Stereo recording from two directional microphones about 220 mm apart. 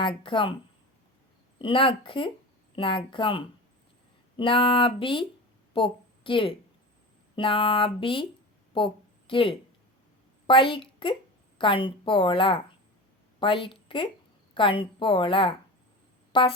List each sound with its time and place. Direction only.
0.0 s a woman's voice: 20° left (ahead or behind)
1.5 s a woman's voice: 25° left (ahead or behind)
8.7 s a sound: 25° left (ahead or behind)
10.4 s a woman's voice: 25° left (ahead or behind)